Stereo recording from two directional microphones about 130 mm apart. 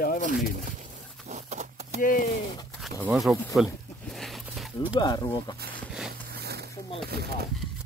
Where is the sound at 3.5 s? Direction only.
Centre (ahead or behind).